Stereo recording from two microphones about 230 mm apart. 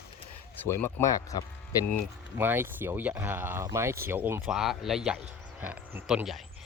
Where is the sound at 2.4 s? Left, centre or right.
Centre.